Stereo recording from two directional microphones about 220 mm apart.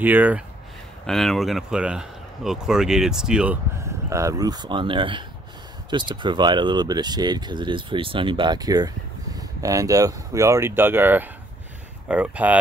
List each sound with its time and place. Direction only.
0.0 s speech: 5° right (ahead or behind)